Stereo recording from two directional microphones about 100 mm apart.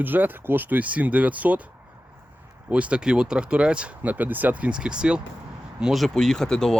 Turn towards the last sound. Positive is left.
turn(degrees=5)  # may be behind; listen again after turning